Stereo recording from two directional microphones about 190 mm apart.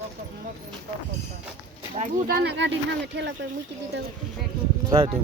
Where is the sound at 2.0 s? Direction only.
50° right (ahead or behind).